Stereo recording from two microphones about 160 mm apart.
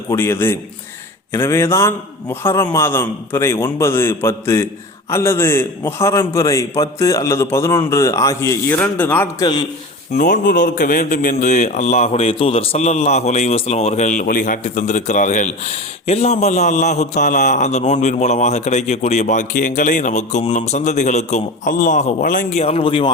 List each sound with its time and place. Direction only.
0.1 s a man's voice: 15° left (ahead or behind)
10.2 s a man's voice: 55° left (ahead or behind)
22.6 s speech: 35° left (ahead or behind)